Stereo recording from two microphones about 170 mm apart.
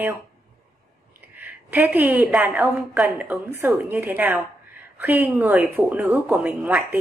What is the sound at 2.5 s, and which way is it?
Speech, 10° right (ahead or behind).